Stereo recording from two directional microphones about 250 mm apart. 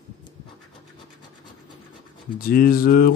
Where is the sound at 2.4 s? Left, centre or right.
Left.